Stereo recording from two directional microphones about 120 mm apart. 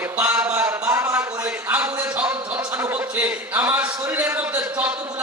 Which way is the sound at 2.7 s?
20° right (ahead or behind).